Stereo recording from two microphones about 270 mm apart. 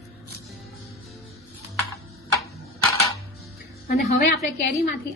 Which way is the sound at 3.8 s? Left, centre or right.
Left.